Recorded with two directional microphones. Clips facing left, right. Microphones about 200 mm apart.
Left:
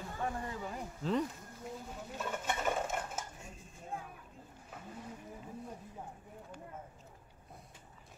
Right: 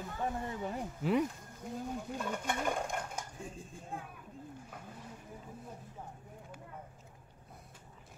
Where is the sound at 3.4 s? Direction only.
30° right (ahead or behind).